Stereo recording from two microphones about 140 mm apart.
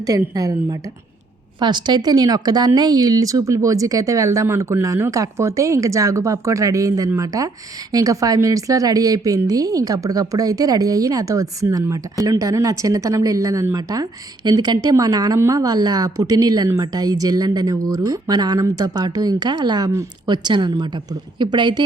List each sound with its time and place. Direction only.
0.0 s a woman's voice: 25° right (ahead or behind)